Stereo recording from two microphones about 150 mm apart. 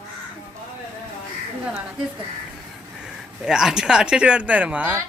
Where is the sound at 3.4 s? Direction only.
5° right (ahead or behind).